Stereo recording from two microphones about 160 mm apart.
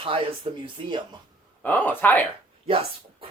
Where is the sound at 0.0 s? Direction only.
35° right (ahead or behind).